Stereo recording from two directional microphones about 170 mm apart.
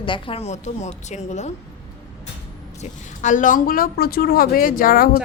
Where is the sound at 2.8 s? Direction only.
50° left (ahead or behind).